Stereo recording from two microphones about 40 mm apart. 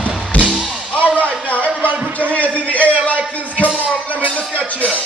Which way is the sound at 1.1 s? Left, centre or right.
Left.